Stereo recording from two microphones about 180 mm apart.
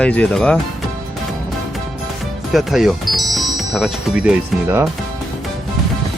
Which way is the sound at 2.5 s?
Centre (ahead or behind).